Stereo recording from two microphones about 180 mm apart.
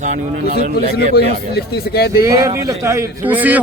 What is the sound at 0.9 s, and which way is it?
A man's voice, 60° left (ahead or behind).